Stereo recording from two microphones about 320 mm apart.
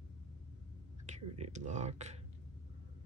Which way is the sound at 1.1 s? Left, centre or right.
Right.